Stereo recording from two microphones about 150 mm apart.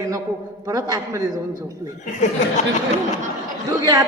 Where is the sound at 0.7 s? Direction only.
20° right (ahead or behind).